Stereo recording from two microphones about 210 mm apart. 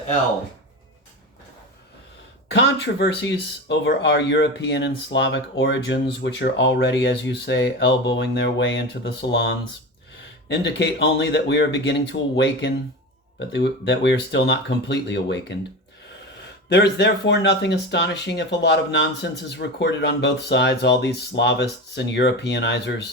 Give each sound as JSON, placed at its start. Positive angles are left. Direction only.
{"t": 2.5, "sound": "speech", "side_deg": 55}
{"t": 13.5, "sound": "speech", "side_deg": 55}
{"t": 16.6, "sound": "speech", "side_deg": 50}